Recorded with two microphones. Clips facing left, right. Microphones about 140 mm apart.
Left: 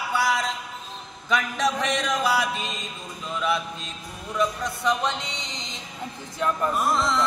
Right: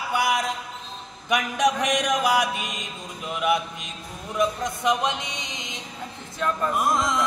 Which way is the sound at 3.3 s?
15° right (ahead or behind).